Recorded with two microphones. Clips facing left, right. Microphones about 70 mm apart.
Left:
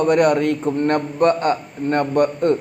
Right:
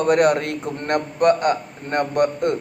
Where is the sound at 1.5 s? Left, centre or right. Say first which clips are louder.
Left 2 dB; centre.